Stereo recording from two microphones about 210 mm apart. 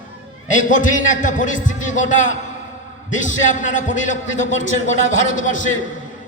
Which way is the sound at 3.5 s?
35° left (ahead or behind).